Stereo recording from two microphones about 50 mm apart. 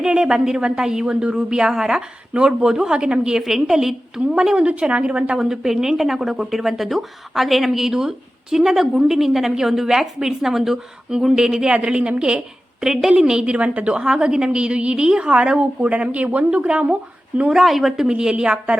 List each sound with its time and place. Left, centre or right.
0.1 s a woman's voice: centre
5.4 s a woman's voice: centre
12.8 s a woman's voice: centre; by 17.5 s right
17.5 s a woman's voice: centre
18.0 s speech: centre